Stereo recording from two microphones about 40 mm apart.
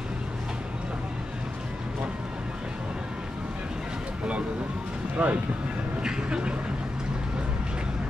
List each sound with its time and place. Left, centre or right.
5.2 s speech: right